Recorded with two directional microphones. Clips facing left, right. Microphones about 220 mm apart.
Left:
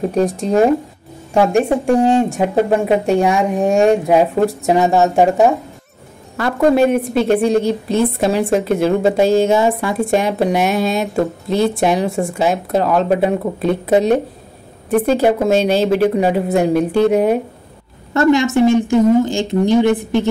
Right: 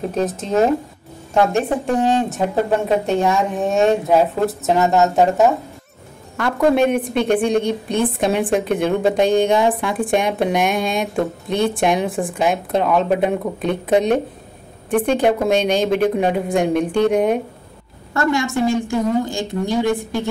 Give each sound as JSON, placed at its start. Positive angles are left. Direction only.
{"t": 0.1, "sound": "a woman's voice", "side_deg": 15}
{"t": 18.1, "sound": "a woman's voice", "side_deg": 20}